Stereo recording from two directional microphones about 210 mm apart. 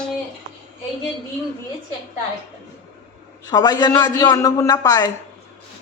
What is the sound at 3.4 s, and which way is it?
A man's voice, 20° left (ahead or behind).